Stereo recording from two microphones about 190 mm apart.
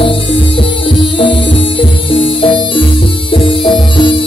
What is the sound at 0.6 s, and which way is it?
Music, 25° left (ahead or behind).